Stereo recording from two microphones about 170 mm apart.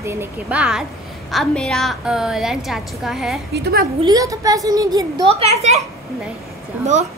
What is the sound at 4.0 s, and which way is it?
A woman's voice, 20° right (ahead or behind).